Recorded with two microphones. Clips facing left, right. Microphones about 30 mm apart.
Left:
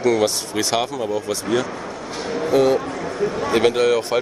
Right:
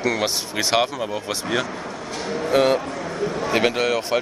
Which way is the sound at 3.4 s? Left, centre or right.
Centre.